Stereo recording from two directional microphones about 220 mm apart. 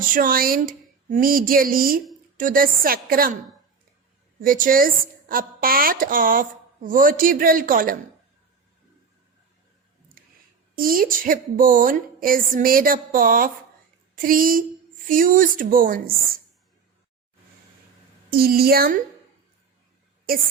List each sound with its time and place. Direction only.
0.1 s a woman's voice: 40° right (ahead or behind)
4.4 s a woman's voice: 40° right (ahead or behind)
10.2 s a sound: 40° right (ahead or behind)
10.8 s a woman's voice: 40° right (ahead or behind)
18.3 s a woman's voice: 45° right (ahead or behind)